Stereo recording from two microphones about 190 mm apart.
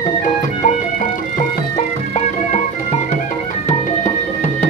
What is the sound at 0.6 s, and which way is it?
Music, 45° left (ahead or behind).